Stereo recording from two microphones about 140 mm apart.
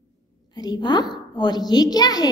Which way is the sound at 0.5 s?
30° left (ahead or behind).